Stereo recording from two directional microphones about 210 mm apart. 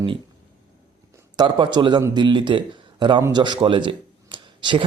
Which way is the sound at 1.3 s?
20° right (ahead or behind).